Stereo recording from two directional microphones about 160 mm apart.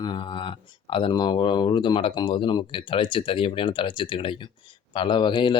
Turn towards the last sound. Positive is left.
turn(degrees=30)  # may be behind; listen again after turning